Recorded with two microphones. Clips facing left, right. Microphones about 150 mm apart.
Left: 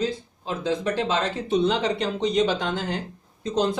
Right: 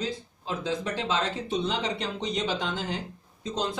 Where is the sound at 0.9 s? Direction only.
65° left (ahead or behind).